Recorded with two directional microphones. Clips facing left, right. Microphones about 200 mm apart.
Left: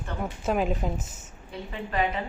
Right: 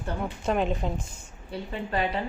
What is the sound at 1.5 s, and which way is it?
Speech, 30° right (ahead or behind).